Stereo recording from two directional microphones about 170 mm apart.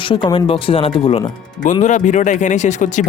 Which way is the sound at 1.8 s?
45° left (ahead or behind).